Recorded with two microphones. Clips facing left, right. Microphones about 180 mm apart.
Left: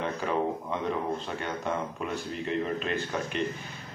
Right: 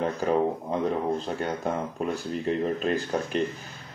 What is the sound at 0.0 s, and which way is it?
Speech, 40° right (ahead or behind).